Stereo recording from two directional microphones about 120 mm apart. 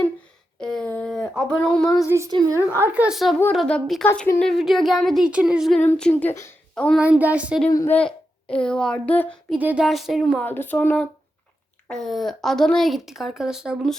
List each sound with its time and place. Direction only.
0.6 s a sound: 5° left (ahead or behind)
1.1 s a woman's voice: 5° left (ahead or behind)
2.0 s a woman's voice: 25° right (ahead or behind); by 5.8 s centre (ahead or behind)
6.0 s speech: 10° left (ahead or behind)
6.3 s speech: 20° left (ahead or behind)
7.0 s speech: 10° right (ahead or behind)
7.9 s a child's voice: 10° left (ahead or behind)
9.6 s speech: 15° right (ahead or behind)
9.8 s a woman's voice: centre (ahead or behind)
10.4 s a woman's voice: 15° left (ahead or behind); by 13.9 s 5° right (ahead or behind)